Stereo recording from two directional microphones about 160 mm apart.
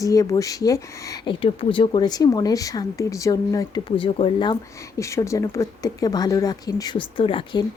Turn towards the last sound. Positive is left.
turn(degrees=30)  # may be behind; listen again after turning